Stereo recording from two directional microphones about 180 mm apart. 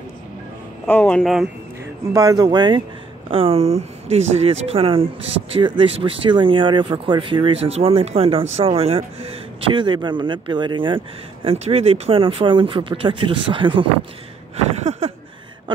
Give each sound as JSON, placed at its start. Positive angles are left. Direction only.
{"t": 0.8, "sound": "speech", "side_deg": 5}
{"t": 2.1, "sound": "speech", "side_deg": -20}